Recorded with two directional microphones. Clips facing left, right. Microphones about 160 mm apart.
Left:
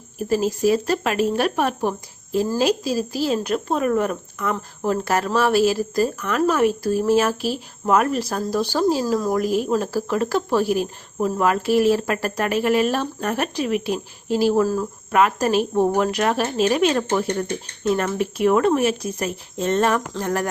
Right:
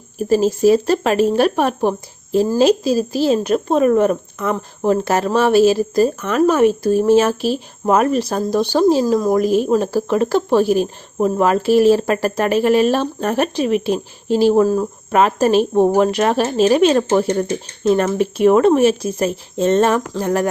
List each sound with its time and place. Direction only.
0.3 s speech: 30° right (ahead or behind)